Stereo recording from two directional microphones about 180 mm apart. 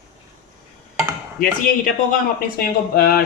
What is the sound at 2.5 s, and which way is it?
Speech, 55° left (ahead or behind).